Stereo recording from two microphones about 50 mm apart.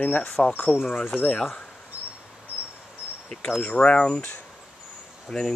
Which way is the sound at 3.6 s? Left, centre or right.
Left.